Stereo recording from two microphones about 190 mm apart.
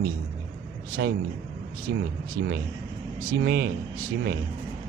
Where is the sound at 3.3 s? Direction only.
60° right (ahead or behind).